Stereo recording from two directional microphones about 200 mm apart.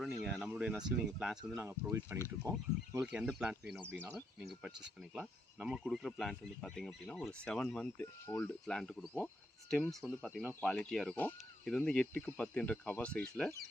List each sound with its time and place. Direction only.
0.0 s a sound: centre (ahead or behind)
0.9 s speech: 5° right (ahead or behind)
5.1 s speech: 5° right (ahead or behind)